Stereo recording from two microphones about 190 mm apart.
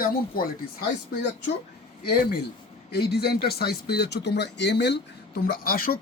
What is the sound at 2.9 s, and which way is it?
Speech, 55° left (ahead or behind).